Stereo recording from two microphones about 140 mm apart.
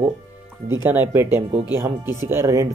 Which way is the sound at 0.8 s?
15° right (ahead or behind).